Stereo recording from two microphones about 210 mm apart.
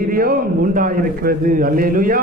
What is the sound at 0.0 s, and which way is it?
A man's voice, 45° right (ahead or behind).